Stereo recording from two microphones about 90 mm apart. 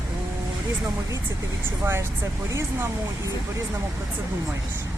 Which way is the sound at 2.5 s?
35° right (ahead or behind).